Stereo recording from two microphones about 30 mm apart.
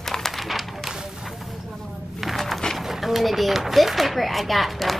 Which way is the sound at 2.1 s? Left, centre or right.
Centre.